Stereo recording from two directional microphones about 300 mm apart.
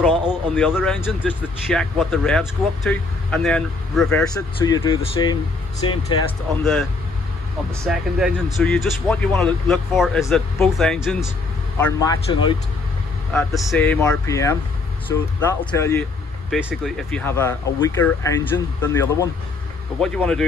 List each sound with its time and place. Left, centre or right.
0.3 s speech: centre
4.3 s speech: centre
7.8 s speech: centre